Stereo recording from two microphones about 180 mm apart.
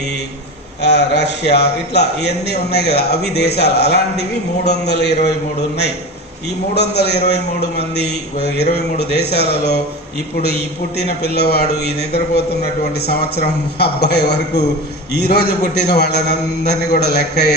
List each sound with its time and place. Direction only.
0.8 s a man's voice: 70° left (ahead or behind)
6.7 s a man's voice: 65° left (ahead or behind)
10.9 s a man's voice: 65° left (ahead or behind)
13.7 s a man's voice: 65° left (ahead or behind)
15.9 s a man's voice: 65° left (ahead or behind)